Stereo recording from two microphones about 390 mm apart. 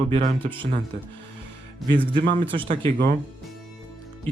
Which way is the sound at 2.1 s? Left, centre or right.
Centre.